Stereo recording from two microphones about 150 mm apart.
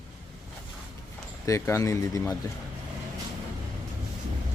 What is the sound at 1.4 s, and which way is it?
Speech, 20° left (ahead or behind).